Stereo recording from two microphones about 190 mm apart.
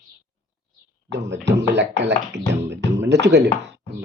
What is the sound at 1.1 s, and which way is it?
Speech, 65° right (ahead or behind).